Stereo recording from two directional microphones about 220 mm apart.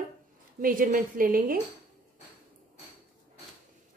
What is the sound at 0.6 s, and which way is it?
A woman's voice, 40° right (ahead or behind).